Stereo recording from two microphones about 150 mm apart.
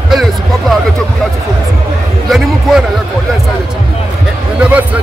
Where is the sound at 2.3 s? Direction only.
Centre (ahead or behind).